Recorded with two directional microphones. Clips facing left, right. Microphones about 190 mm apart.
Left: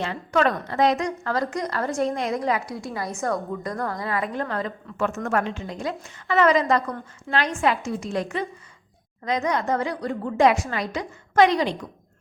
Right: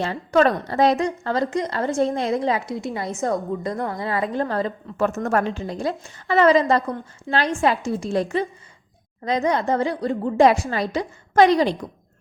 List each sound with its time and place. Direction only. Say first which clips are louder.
0.0 s a woman's voice: right 4 dB; 35° right (ahead or behind)